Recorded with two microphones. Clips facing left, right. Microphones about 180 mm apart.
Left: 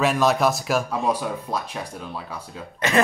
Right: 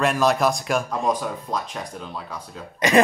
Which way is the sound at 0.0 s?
Centre (ahead or behind).